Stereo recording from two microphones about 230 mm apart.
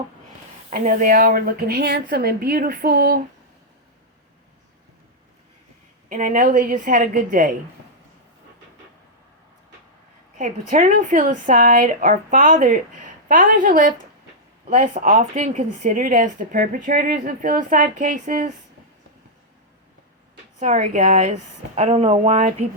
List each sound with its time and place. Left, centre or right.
0.7 s a woman's voice: right
6.1 s a woman's voice: right
10.3 s a woman's voice: right
20.6 s a woman's voice: right